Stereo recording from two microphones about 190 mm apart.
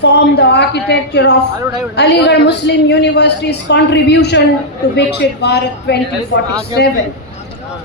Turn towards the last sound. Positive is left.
turn(degrees=60)  # may be behind; listen again after turning